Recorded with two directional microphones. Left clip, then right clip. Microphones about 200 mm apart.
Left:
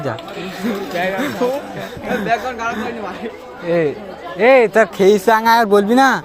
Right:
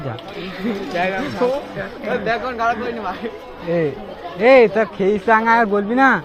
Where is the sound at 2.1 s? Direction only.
15° left (ahead or behind).